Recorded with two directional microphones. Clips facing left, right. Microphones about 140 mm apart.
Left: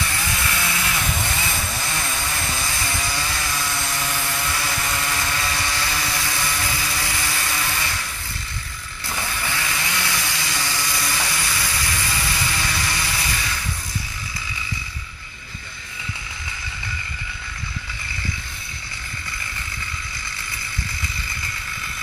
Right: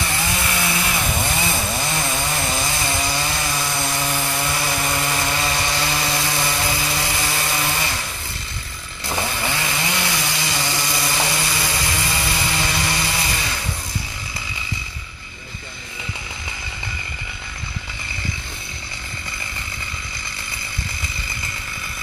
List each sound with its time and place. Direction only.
0.1 s chainsaw: 20° right (ahead or behind)
9.2 s chainsaw: 25° right (ahead or behind)